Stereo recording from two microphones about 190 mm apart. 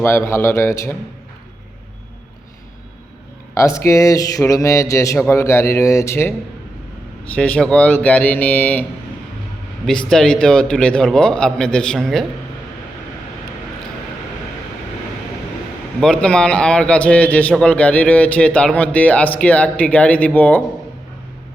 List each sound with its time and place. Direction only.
0.0 s a man's voice: 15° left (ahead or behind)
3.5 s a man's voice: 15° left (ahead or behind)
7.3 s a man's voice: 5° left (ahead or behind)
10.1 s a man's voice: 5° left (ahead or behind)
16.0 s a man's voice: 5° left (ahead or behind)